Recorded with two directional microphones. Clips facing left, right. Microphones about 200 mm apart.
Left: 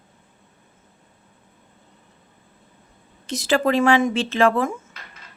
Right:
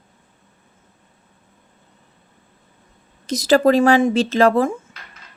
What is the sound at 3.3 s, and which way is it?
Speech, 40° right (ahead or behind).